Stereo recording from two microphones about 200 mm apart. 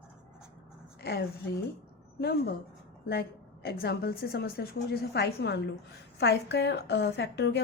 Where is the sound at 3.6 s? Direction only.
50° left (ahead or behind).